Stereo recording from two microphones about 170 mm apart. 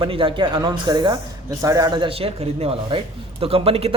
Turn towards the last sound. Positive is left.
turn(degrees=-35)  # may be behind; listen again after turning